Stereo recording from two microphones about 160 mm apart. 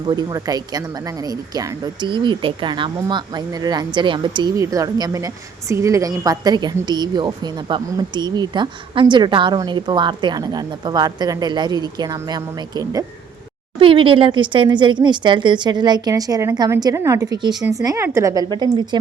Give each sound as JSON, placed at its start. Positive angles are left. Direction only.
{"t": 0.0, "sound": "speech", "side_deg": -25}
{"t": 13.7, "sound": "speech", "side_deg": -35}